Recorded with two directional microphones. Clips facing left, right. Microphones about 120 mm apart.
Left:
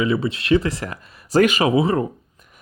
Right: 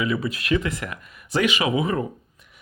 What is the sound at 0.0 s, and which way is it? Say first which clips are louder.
Speech: left 4 dB; 25° left (ahead or behind).